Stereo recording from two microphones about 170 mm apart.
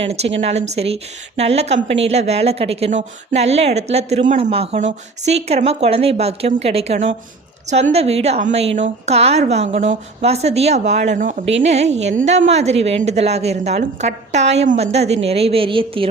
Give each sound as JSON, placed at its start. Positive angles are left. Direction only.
{"t": 0.0, "sound": "a woman's voice", "side_deg": -35}